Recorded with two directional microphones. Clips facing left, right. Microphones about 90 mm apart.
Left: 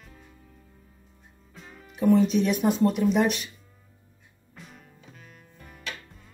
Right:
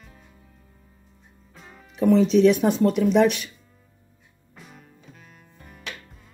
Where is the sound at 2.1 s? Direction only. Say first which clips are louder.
Right 5 dB; 90° right.